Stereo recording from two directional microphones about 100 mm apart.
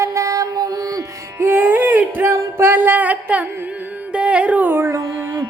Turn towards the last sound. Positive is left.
turn(degrees=-30)  # may be behind; listen again after turning